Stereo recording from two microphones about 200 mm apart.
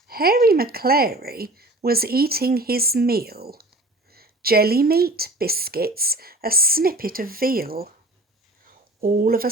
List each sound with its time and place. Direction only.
0.1 s a woman's voice: 50° right (ahead or behind)
9.0 s a woman's voice: 45° right (ahead or behind)